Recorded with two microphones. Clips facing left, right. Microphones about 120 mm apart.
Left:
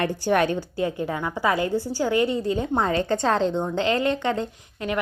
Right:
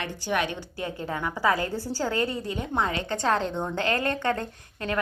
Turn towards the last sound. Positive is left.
turn(degrees=20)  # may be behind; listen again after turning